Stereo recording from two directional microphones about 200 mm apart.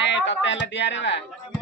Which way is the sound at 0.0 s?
65° left (ahead or behind).